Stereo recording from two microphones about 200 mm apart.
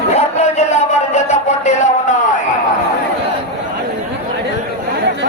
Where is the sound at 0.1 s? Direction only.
35° left (ahead or behind).